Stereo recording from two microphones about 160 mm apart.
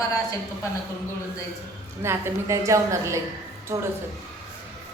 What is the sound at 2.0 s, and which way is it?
A woman's voice, 15° right (ahead or behind).